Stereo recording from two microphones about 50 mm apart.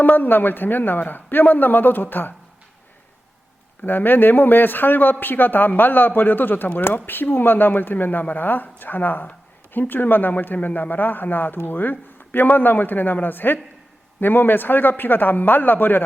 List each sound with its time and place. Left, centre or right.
0.0 s a man's voice: left
3.8 s a man's voice: left